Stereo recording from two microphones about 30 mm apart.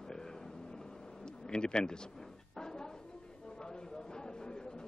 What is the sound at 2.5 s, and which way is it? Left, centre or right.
Drawer open or close, left.